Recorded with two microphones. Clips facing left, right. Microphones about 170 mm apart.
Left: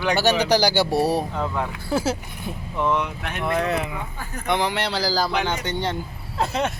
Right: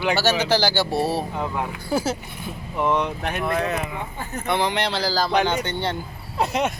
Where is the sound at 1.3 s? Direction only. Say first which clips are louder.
Left 1 dB; 15° right (ahead or behind).